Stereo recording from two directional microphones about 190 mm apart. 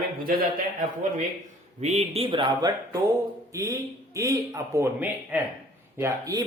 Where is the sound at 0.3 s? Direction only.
50° right (ahead or behind).